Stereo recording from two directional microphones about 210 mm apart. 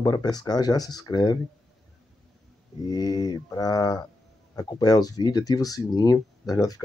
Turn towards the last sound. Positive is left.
turn(degrees=15)  # may be behind; listen again after turning